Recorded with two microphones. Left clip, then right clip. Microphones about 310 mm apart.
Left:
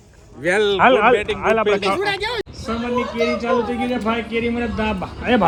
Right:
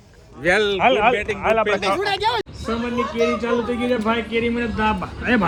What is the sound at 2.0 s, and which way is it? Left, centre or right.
Speech, centre.